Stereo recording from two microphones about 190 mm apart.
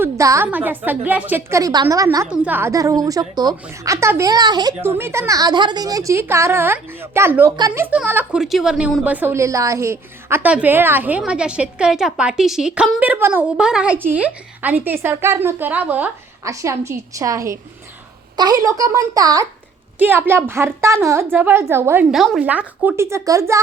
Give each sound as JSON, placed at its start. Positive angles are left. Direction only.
{"t": 0.0, "sound": "a woman's voice", "side_deg": -15}
{"t": 2.2, "sound": "a woman's voice", "side_deg": -5}
{"t": 22.1, "sound": "a woman's voice", "side_deg": 0}